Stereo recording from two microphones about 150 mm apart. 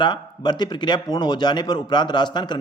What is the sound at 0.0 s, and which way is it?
A man's voice, 30° left (ahead or behind).